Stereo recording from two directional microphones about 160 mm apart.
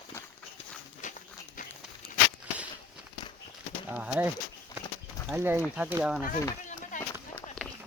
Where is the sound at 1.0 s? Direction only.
50° left (ahead or behind).